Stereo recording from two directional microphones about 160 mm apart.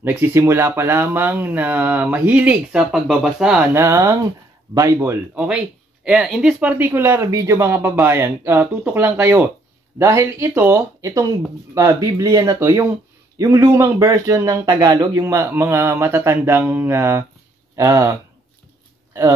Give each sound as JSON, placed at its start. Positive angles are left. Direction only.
{"t": 0.0, "sound": "speech", "side_deg": -15}
{"t": 3.7, "sound": "speech", "side_deg": -20}